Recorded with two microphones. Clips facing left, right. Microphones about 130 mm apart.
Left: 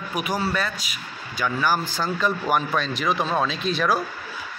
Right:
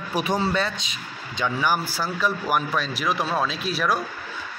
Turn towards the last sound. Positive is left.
turn(degrees=0)  # may be behind; listen again after turning